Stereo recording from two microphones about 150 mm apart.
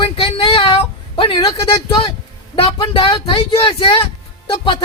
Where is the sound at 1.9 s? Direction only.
35° left (ahead or behind).